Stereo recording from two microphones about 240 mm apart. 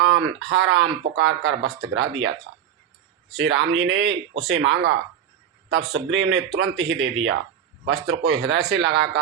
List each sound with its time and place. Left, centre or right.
0.0 s a sound: right
0.4 s a man's voice: right
3.3 s a man's voice: centre
3.7 s a man's voice: right